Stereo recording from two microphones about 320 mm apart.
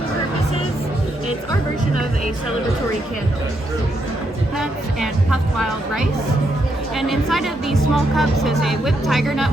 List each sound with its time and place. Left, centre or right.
4.5 s speech: centre